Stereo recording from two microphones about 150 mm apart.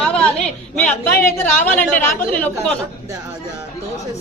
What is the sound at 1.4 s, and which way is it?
A woman's voice, 10° left (ahead or behind).